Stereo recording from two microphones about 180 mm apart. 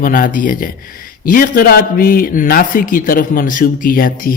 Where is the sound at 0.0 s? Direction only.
50° left (ahead or behind).